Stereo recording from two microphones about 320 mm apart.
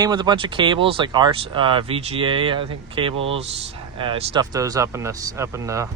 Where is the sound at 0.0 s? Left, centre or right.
Centre.